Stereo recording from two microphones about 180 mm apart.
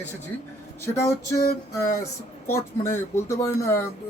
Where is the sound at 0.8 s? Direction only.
15° left (ahead or behind).